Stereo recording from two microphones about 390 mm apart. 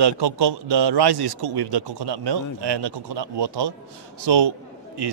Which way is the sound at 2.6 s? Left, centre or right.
Right.